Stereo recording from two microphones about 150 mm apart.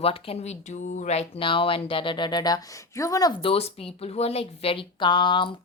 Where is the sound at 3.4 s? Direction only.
40° left (ahead or behind).